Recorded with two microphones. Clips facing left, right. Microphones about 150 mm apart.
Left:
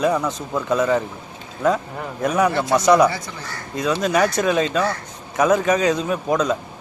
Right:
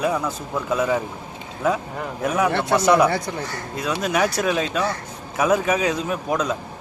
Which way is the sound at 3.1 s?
55° right (ahead or behind).